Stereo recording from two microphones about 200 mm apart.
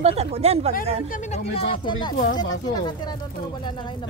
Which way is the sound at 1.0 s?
40° left (ahead or behind).